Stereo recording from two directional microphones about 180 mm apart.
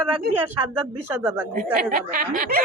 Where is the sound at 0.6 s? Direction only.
15° right (ahead or behind).